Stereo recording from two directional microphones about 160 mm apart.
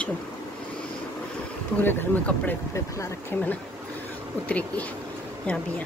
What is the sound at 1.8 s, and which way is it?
A woman's voice, 10° left (ahead or behind).